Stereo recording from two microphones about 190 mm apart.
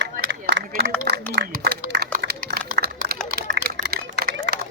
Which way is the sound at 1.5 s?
50° right (ahead or behind).